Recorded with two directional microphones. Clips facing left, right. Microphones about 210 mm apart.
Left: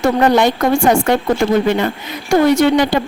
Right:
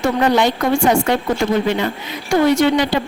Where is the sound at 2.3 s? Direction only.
45° left (ahead or behind).